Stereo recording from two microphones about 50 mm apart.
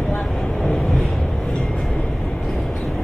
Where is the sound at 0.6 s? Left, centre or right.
Centre.